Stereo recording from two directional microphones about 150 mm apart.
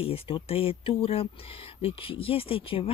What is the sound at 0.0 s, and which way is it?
Speech, 40° left (ahead or behind).